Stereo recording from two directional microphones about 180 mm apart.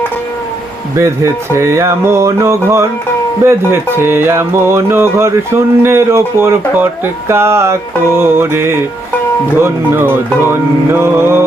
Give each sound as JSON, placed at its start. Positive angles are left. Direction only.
{"t": 0.9, "sound": "speech", "side_deg": -15}